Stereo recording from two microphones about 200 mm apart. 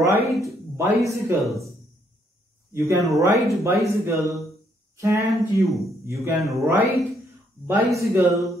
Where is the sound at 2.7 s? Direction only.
15° right (ahead or behind).